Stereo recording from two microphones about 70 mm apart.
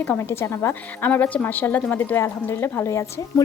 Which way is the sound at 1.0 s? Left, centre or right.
Left.